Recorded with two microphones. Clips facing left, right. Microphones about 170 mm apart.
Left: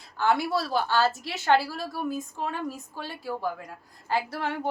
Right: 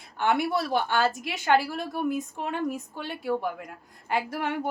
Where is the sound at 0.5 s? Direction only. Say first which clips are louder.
Even; 20° right (ahead or behind).